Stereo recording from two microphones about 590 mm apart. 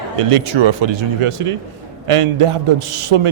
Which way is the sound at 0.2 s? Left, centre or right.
Right.